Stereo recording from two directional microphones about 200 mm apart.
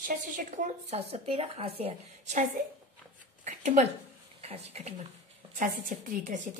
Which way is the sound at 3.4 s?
35° right (ahead or behind).